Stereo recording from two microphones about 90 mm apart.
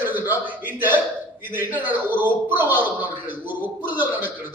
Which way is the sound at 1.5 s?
20° right (ahead or behind).